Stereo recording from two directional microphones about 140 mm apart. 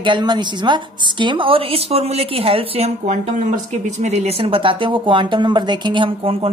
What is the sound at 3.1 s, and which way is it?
Speech, 65° right (ahead or behind).